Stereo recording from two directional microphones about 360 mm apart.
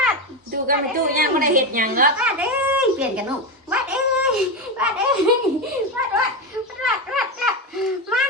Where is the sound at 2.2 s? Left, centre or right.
Centre.